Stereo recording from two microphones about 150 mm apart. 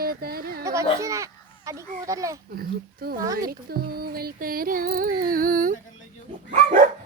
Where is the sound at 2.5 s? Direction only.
85° right.